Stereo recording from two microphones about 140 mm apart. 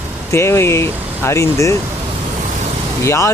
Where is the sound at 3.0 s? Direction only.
20° left (ahead or behind).